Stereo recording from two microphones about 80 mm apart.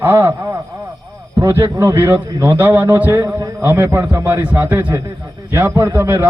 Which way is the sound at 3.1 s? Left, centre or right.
Right.